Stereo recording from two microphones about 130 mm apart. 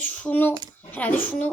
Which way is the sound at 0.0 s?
10° left (ahead or behind).